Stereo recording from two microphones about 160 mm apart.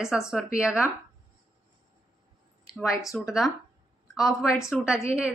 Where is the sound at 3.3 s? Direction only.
Centre (ahead or behind).